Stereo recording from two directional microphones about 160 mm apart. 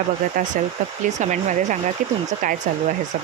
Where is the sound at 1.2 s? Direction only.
50° right (ahead or behind).